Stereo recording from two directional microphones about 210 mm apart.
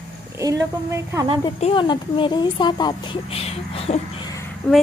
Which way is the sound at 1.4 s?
20° left (ahead or behind).